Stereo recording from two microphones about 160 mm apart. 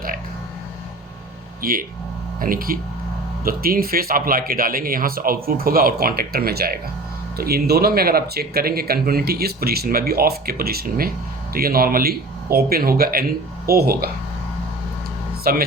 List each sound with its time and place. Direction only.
1.6 s speech: 65° right (ahead or behind)
15.5 s speech: 65° right (ahead or behind)